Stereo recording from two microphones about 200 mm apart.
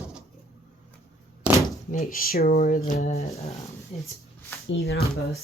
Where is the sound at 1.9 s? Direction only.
45° left (ahead or behind).